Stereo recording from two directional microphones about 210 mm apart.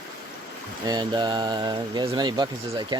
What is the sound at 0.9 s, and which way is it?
Speech, 20° right (ahead or behind).